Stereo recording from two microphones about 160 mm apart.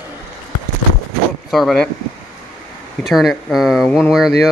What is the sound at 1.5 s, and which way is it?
Speech, centre (ahead or behind).